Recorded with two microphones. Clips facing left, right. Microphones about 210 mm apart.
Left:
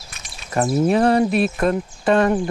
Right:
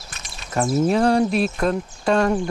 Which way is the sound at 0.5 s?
Centre (ahead or behind).